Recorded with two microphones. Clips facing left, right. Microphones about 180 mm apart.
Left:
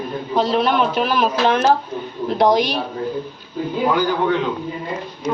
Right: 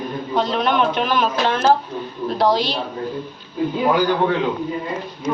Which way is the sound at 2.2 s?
20° left (ahead or behind).